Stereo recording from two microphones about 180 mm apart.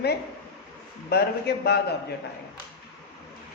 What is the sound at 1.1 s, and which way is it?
Speech, 60° left (ahead or behind).